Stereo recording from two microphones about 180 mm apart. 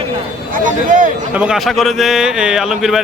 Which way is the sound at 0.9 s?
45° right (ahead or behind).